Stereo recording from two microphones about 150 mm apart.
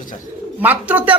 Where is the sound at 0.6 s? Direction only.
10° right (ahead or behind).